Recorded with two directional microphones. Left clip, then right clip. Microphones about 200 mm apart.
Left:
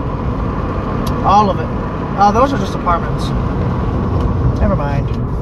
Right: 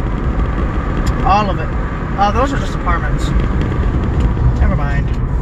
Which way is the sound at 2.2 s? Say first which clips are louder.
Left 3 dB; 30° left (ahead or behind).